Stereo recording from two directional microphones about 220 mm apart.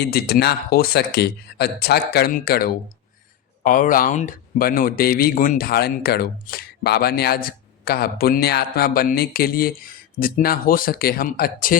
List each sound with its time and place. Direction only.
0.0 s speech: 45° left (ahead or behind)